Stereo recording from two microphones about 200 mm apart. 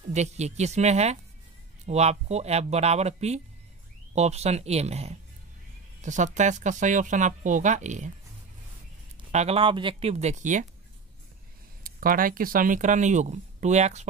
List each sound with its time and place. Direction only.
0.1 s speech: 35° right (ahead or behind)
9.3 s speech: 30° right (ahead or behind)
11.8 s speech: 45° right (ahead or behind)